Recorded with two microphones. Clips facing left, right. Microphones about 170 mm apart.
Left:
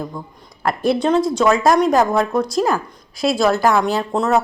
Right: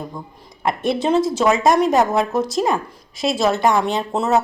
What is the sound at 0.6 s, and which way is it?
A woman's voice, centre (ahead or behind).